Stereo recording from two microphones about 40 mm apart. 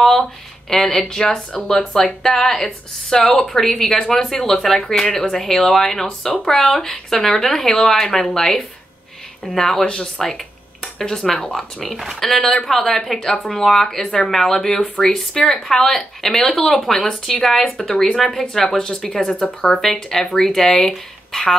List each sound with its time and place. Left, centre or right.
0.7 s speech: centre
9.8 s speech: left
10.2 s speech: centre